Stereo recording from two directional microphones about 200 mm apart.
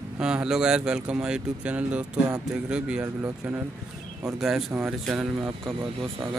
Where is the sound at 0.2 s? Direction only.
5° right (ahead or behind).